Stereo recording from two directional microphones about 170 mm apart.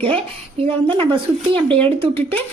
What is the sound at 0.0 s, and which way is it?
Speech, 35° right (ahead or behind).